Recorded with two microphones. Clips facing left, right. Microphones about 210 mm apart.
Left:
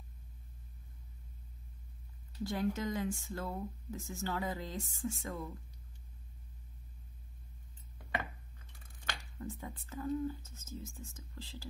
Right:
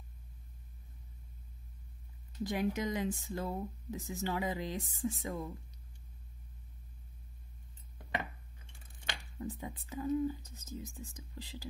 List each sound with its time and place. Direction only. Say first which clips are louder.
2.4 s speech: right 1 dB; 15° right (ahead or behind)
9.4 s speech: right 4 dB; 15° right (ahead or behind)